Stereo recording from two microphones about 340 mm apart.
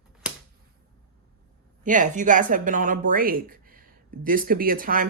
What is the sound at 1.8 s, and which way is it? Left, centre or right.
Speech, right.